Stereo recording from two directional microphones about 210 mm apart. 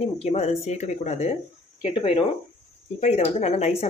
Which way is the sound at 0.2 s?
30° left (ahead or behind).